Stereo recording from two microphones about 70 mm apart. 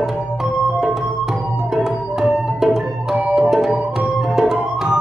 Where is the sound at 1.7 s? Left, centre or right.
Centre.